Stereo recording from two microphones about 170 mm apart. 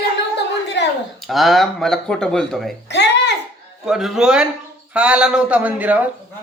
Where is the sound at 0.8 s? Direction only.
90° left.